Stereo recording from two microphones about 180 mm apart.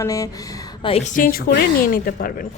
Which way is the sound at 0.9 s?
45° left (ahead or behind).